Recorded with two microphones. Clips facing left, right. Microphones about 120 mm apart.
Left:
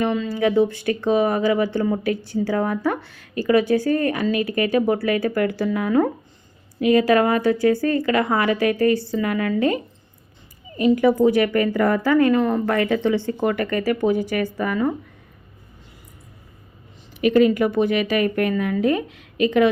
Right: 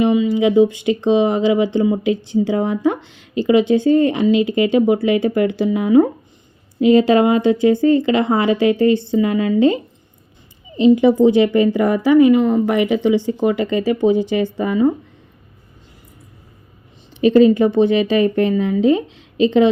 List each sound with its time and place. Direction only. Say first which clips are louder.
0.0 s a woman's voice: right 6 dB; 15° right (ahead or behind)
17.2 s speech: right 5 dB; 30° right (ahead or behind)